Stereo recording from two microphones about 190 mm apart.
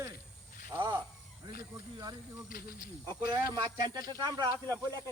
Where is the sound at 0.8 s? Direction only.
25° right (ahead or behind).